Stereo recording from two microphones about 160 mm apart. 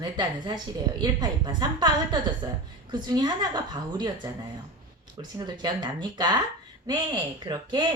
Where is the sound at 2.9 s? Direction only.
25° right (ahead or behind).